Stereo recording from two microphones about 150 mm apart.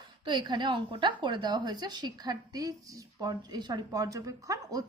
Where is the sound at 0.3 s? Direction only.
30° right (ahead or behind).